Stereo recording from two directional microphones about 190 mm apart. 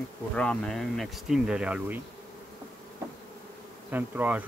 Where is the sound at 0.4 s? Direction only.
5° left (ahead or behind).